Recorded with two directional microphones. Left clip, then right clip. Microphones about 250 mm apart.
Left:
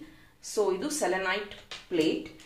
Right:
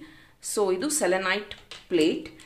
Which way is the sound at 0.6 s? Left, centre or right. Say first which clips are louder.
Right 3 dB; right.